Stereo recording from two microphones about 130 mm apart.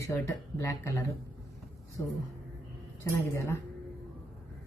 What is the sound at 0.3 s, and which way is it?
Speech, 25° left (ahead or behind).